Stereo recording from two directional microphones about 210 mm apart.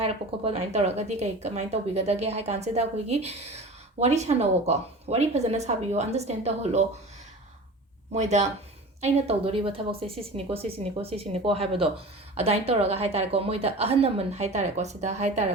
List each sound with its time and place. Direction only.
0.0 s speech: 30° right (ahead or behind)
8.1 s speech: 35° right (ahead or behind)